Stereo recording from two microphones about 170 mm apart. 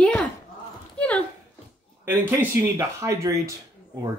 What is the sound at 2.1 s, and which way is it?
Speech, 15° right (ahead or behind).